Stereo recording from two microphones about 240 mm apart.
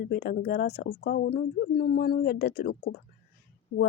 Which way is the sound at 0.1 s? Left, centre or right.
Left.